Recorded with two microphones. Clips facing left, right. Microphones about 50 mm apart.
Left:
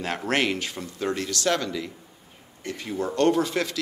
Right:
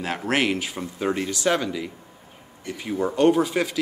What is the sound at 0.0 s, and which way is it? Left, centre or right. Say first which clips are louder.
Speech: right 1 dB; centre.